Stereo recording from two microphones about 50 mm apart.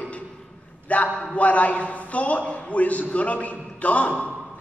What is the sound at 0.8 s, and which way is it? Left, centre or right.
A man's voice, left.